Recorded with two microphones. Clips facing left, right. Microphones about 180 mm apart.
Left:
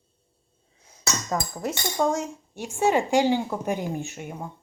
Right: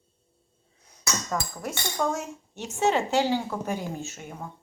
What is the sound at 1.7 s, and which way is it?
A woman's voice, 20° left (ahead or behind).